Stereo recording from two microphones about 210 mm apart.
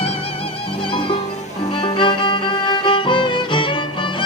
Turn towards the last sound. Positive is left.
turn(degrees=25)  # may be behind; listen again after turning